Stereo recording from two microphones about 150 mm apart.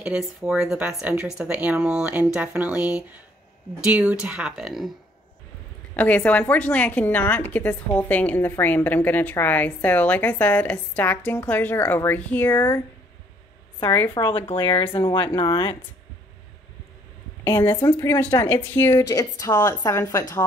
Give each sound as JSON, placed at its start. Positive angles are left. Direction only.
{"t": 0.0, "sound": "speech", "side_deg": -5}
{"t": 5.9, "sound": "a woman's voice", "side_deg": 10}
{"t": 14.1, "sound": "speech", "side_deg": 35}
{"t": 17.5, "sound": "speech", "side_deg": 25}